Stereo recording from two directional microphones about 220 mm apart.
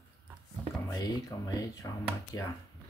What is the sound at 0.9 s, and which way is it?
Speech, 15° left (ahead or behind).